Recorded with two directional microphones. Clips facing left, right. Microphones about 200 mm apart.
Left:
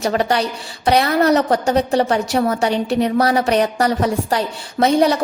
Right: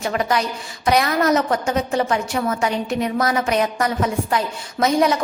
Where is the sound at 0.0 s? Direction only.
35° left (ahead or behind).